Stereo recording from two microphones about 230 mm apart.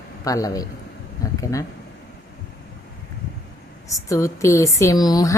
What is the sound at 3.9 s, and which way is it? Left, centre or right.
Speech, centre.